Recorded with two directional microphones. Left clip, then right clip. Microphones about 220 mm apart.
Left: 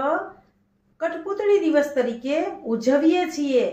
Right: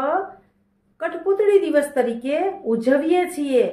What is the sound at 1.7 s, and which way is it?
A woman's voice, 45° right (ahead or behind).